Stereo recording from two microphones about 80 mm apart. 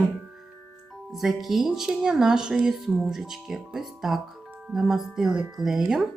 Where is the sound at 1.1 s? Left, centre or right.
Centre.